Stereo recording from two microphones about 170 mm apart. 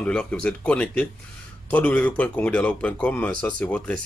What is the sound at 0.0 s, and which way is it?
Speech, 5° left (ahead or behind).